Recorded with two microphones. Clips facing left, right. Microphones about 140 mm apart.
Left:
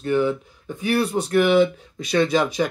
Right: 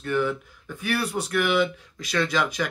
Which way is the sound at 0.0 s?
20° left (ahead or behind).